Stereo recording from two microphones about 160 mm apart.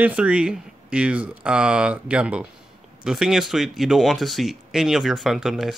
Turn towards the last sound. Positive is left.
turn(degrees=0)  # may be behind; listen again after turning